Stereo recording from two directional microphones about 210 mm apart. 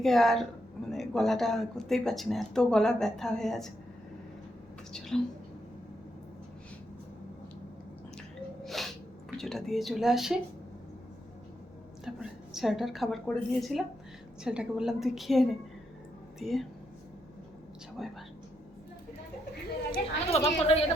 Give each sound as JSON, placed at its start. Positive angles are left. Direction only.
{"t": 0.0, "sound": "speech", "side_deg": 0}
{"t": 4.9, "sound": "speech", "side_deg": 0}
{"t": 8.6, "sound": "sneeze", "side_deg": 0}
{"t": 9.4, "sound": "speech", "side_deg": 0}
{"t": 12.0, "sound": "speech", "side_deg": 0}
{"t": 18.0, "sound": "speech", "side_deg": 0}
{"t": 19.9, "sound": "a woman's voice", "side_deg": 30}